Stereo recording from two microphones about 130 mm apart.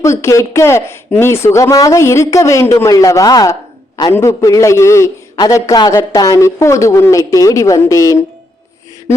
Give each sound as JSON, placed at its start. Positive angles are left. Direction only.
{"t": 0.0, "sound": "speech", "side_deg": 25}